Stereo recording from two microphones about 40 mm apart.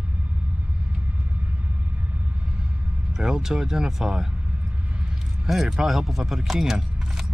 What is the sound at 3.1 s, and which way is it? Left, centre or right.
Speech, centre.